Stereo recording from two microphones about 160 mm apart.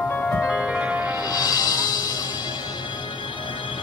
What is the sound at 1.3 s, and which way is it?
Music, 25° left (ahead or behind).